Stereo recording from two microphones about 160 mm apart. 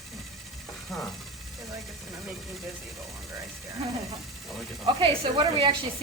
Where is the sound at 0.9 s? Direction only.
Centre (ahead or behind).